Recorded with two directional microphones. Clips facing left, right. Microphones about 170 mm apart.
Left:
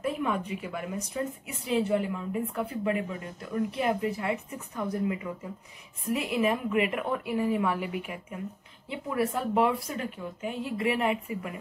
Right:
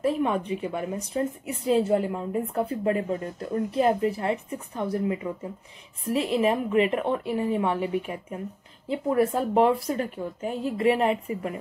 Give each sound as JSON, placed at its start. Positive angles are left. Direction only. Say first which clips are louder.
{"t": 0.0, "sound": "a woman's voice", "louder": "right 5 dB", "side_deg": -30}